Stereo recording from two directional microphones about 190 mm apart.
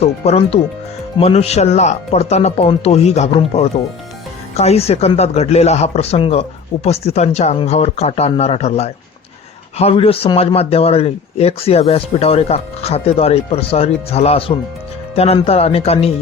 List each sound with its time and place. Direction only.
0.0 s a man's voice: 30° left (ahead or behind)